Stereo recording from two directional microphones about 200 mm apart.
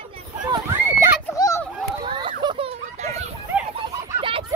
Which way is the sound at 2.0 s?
25° right (ahead or behind).